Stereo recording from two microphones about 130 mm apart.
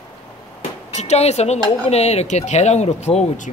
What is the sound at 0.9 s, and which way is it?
Speech, 60° left (ahead or behind).